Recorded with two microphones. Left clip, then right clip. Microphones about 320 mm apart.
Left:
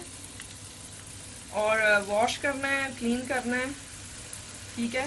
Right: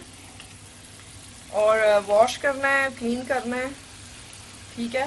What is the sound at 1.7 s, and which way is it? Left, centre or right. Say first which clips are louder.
A woman's voice: right 4 dB; centre.